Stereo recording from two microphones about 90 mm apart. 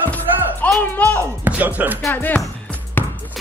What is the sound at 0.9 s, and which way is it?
Speech, 20° left (ahead or behind).